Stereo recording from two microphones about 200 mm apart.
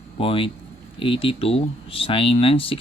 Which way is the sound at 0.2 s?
25° left (ahead or behind).